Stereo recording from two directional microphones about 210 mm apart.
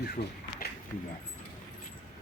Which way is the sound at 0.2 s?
50° left (ahead or behind).